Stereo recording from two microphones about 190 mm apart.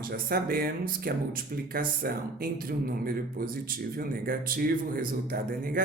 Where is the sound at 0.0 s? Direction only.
50° right (ahead or behind).